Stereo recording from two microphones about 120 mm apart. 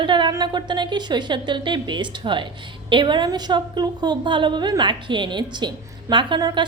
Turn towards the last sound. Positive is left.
turn(degrees=-35)  # may be behind; listen again after turning